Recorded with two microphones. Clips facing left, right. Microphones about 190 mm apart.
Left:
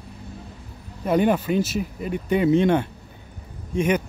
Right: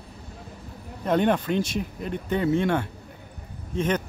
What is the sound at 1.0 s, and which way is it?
Speech, 5° left (ahead or behind).